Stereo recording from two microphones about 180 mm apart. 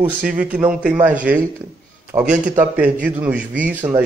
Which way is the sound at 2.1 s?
5° right (ahead or behind).